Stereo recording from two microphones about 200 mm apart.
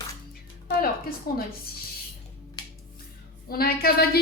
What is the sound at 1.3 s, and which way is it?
Speech, 50° left (ahead or behind).